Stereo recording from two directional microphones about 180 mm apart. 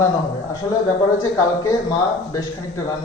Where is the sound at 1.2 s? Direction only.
15° left (ahead or behind).